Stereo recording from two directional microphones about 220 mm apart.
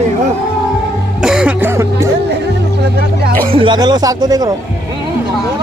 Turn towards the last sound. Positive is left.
turn(degrees=-20)  # may be behind; listen again after turning